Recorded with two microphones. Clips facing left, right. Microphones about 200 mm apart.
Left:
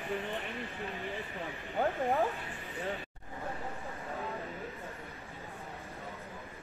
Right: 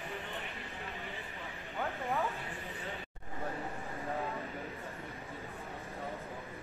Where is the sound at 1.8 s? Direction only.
35° left (ahead or behind).